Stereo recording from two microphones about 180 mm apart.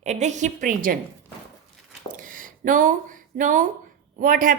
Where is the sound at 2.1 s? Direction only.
50° right (ahead or behind).